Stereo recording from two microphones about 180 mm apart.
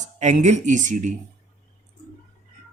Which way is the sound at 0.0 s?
40° right (ahead or behind).